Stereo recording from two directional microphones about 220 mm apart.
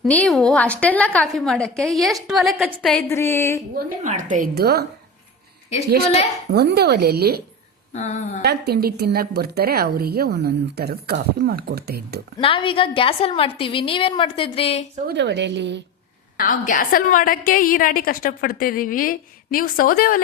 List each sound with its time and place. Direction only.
0.0 s a woman's voice: 5° left (ahead or behind)
2.8 s a sound: 10° left (ahead or behind)
3.8 s a woman's voice: 35° right (ahead or behind)
6.5 s a woman's voice: 50° right (ahead or behind)
7.9 s a woman's voice: 30° left (ahead or behind)
8.4 s a woman's voice: 50° right (ahead or behind)
12.4 s a woman's voice: 25° left (ahead or behind)
15.0 s a woman's voice: 50° right (ahead or behind)
16.4 s a woman's voice: 40° left (ahead or behind)